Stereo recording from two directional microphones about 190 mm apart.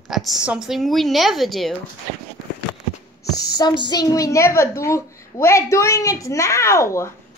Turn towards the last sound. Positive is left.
turn(degrees=15)  # may be behind; listen again after turning